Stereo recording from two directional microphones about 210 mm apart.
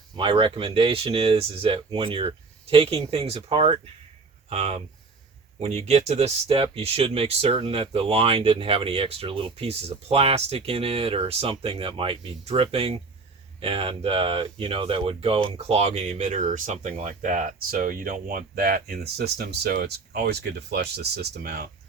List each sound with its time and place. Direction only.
0.2 s speech: 25° right (ahead or behind); by 21.7 s 45° right (ahead or behind)